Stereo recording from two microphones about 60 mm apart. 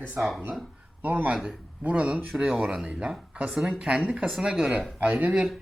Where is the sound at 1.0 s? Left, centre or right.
Right.